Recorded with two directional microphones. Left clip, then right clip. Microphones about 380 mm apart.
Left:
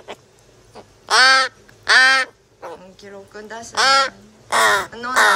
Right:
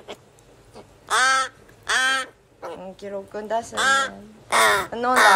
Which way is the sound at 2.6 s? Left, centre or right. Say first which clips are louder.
Right 1 dB; centre.